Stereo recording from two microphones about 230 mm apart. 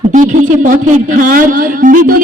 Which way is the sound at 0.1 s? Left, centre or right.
Right.